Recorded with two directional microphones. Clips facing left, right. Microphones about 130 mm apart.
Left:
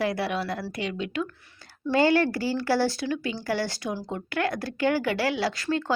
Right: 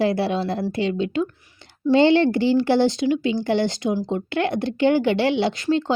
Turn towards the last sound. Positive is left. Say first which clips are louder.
# right 6 dB
turn(degrees=-25)  # may be behind; listen again after turning